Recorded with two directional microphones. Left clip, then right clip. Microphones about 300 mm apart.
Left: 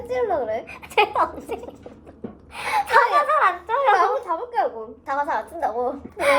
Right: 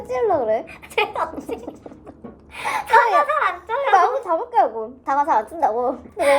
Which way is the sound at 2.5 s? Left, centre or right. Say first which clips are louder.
Right 2 dB; centre.